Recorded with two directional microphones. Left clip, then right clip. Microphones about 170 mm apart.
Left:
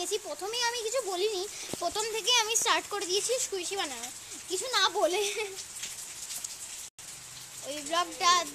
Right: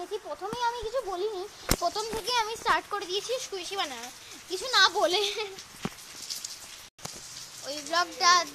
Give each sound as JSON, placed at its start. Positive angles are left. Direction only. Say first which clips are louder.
{"t": 0.0, "sound": "speech", "louder": "left 1 dB", "side_deg": 30}
{"t": 1.8, "sound": "speech", "louder": "left 3 dB", "side_deg": 15}
{"t": 4.6, "sound": "speech", "louder": "right 4 dB", "side_deg": 0}
{"t": 7.6, "sound": "speech", "louder": "right 2 dB", "side_deg": 15}